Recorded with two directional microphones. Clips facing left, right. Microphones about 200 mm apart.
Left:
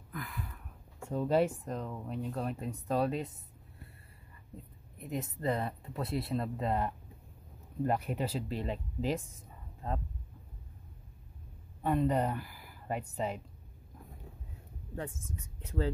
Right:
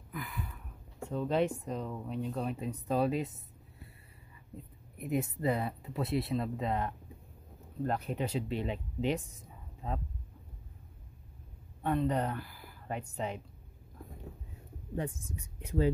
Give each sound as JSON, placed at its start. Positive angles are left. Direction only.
{"t": 0.1, "sound": "a sound", "side_deg": 0}
{"t": 1.1, "sound": "speech", "side_deg": 10}
{"t": 4.9, "sound": "speech", "side_deg": -10}
{"t": 11.8, "sound": "speech", "side_deg": 5}
{"t": 15.0, "sound": "speech", "side_deg": -15}